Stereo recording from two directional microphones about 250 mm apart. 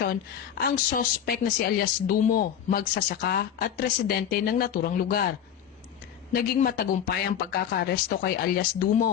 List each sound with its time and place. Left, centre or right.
0.6 s speech: left
6.3 s speech: left